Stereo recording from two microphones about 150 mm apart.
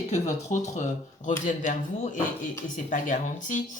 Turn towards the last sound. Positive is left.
turn(degrees=60)  # may be behind; listen again after turning